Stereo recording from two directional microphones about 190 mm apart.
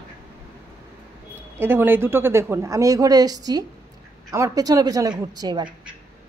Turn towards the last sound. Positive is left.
turn(degrees=-20)  # may be behind; listen again after turning